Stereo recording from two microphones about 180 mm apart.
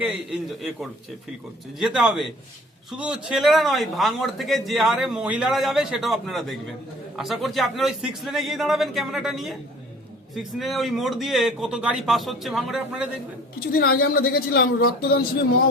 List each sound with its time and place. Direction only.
0.0 s speech: 5° right (ahead or behind)
13.6 s a woman's voice: 55° left (ahead or behind)